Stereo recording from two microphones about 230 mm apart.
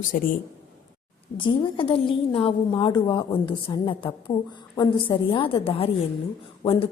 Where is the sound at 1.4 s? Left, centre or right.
Left.